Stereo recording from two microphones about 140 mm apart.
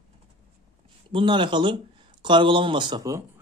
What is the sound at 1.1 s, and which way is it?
Speech, 35° right (ahead or behind).